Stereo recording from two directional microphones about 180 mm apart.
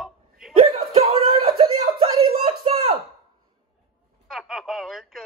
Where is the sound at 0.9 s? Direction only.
35° right (ahead or behind).